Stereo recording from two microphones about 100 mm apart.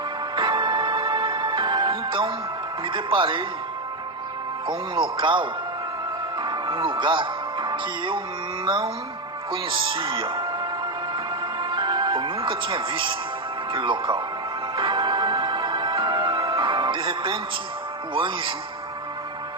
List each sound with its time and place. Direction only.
0.3 s music: 55° right (ahead or behind)
2.8 s speech: 55° right (ahead or behind)
4.6 s speech: 55° right (ahead or behind)
8.6 s music: 55° right (ahead or behind)
9.5 s speech: 55° right (ahead or behind)
11.6 s music: 55° right (ahead or behind)
13.7 s speech: 55° right (ahead or behind)
14.8 s music: 55° right (ahead or behind)
18.1 s speech: 55° right (ahead or behind)